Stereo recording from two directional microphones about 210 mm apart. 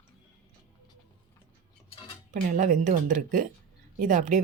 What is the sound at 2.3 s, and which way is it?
Speech, 40° right (ahead or behind).